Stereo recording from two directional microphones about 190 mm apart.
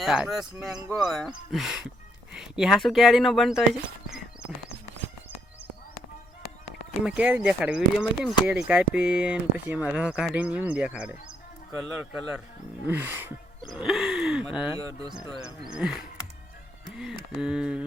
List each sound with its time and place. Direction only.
0.0 s speech: centre (ahead or behind)
7.0 s speech: 5° right (ahead or behind)
13.7 s gasp: centre (ahead or behind)
14.8 s speech: 15° right (ahead or behind)
15.1 s speech: 5° right (ahead or behind)